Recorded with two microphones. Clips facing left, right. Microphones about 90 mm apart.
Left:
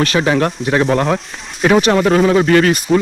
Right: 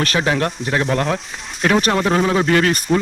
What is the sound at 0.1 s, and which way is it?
Speech, 90° left.